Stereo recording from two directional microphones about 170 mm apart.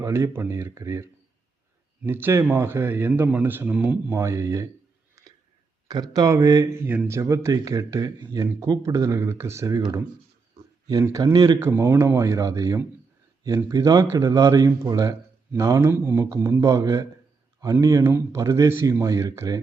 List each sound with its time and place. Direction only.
0.0 s a man's voice: 15° right (ahead or behind)
5.2 s a sound: 20° right (ahead or behind)
5.9 s speech: 20° right (ahead or behind)
6.7 s speech: 10° right (ahead or behind)
10.8 s a man's voice: 20° right (ahead or behind)